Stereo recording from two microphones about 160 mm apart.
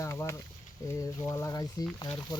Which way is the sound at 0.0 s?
15° left (ahead or behind).